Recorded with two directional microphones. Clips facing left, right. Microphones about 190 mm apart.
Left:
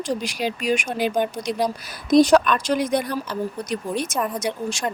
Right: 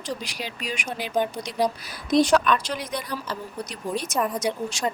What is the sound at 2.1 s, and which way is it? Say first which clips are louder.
Speech: left 4 dB; 40° left (ahead or behind).